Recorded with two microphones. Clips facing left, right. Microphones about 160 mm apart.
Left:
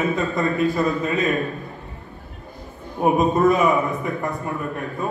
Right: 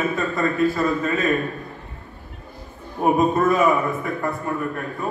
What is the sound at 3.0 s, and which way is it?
A man's voice, 20° left (ahead or behind).